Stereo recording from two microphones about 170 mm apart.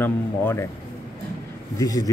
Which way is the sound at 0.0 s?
15° left (ahead or behind).